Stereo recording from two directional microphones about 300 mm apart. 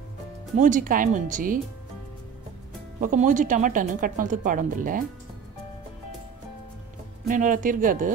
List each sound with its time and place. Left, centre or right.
0.6 s speech: right
3.0 s speech: right
7.2 s speech: right